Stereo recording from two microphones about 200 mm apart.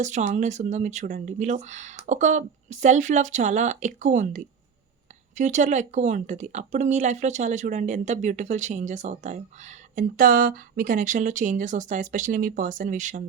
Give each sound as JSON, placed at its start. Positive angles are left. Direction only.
{"t": 0.0, "sound": "speech", "side_deg": -35}